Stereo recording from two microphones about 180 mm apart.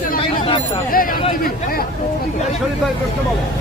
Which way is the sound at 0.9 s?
55° left (ahead or behind).